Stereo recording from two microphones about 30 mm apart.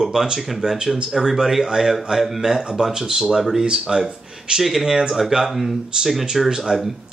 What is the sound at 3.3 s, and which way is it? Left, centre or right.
Speech, centre.